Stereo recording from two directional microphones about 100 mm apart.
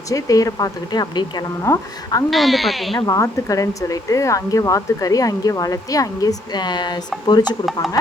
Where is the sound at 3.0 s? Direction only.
35° left (ahead or behind).